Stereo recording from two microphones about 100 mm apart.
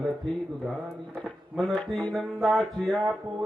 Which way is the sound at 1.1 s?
15° right (ahead or behind).